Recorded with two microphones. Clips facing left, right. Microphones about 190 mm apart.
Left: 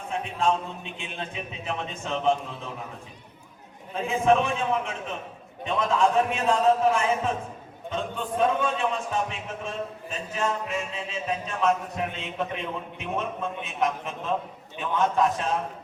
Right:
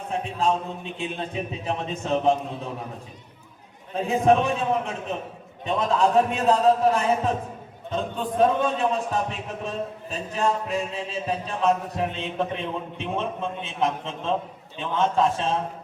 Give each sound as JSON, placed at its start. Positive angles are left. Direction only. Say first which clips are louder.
{"t": 0.1, "sound": "a man's voice", "louder": "right 1 dB", "side_deg": -40}
{"t": 3.9, "sound": "a man's voice", "louder": "right 2 dB", "side_deg": -40}